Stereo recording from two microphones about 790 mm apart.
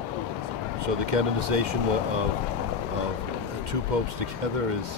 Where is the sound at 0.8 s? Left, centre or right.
Right.